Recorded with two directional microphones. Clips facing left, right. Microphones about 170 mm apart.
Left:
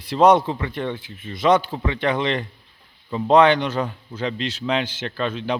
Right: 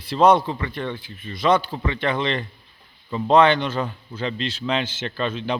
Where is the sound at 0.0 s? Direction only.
15° left (ahead or behind).